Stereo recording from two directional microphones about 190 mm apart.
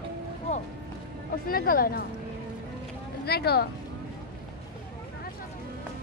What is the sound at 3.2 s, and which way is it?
Speech, 55° left (ahead or behind).